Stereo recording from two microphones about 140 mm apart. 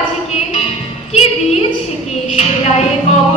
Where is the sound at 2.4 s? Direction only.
50° left (ahead or behind).